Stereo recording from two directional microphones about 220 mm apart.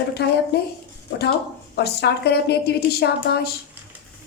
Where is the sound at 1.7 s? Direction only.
50° left (ahead or behind).